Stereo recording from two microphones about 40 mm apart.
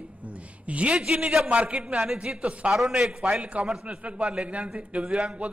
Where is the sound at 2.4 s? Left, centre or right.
Right.